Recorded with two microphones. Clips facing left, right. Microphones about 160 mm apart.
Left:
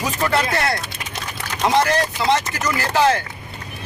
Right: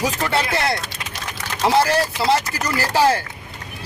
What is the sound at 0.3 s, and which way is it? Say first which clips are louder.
Speech: left 4 dB; 30° right (ahead or behind).